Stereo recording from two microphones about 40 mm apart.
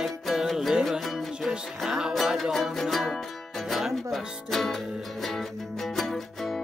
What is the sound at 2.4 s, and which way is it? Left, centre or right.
Music, centre.